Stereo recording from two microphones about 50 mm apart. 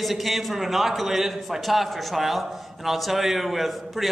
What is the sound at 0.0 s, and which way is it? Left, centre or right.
A man's voice, centre.